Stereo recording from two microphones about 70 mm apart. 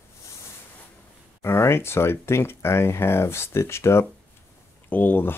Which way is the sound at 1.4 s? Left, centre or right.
Left.